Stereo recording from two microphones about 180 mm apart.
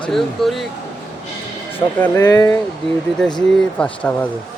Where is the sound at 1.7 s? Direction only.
15° left (ahead or behind).